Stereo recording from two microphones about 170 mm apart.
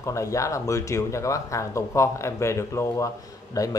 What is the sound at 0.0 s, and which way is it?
Speech, 15° left (ahead or behind).